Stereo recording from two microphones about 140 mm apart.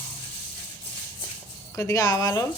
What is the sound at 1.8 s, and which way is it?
Speech, 20° left (ahead or behind).